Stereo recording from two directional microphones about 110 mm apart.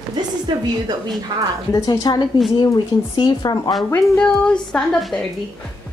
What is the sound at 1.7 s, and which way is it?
Speech, 35° left (ahead or behind).